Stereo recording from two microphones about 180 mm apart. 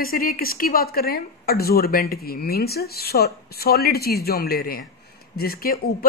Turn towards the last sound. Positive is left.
turn(degrees=55)  # may be behind; listen again after turning